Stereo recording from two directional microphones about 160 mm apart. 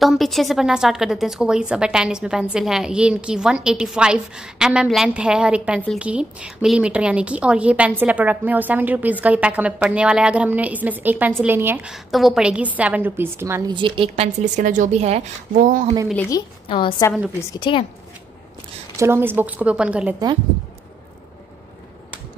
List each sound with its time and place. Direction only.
0.0 s a woman's voice: centre (ahead or behind)
13.7 s a woman's voice: 30° right (ahead or behind); by 15.9 s 55° right (ahead or behind)
16.3 s a woman's voice: 25° left (ahead or behind)
18.9 s a woman's voice: 15° right (ahead or behind)